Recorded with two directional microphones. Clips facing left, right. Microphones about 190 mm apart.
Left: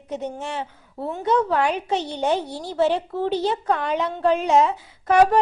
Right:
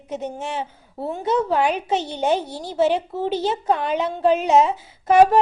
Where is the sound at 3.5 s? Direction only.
25° right (ahead or behind).